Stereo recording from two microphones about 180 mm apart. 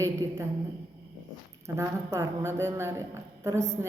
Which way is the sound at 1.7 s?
15° right (ahead or behind).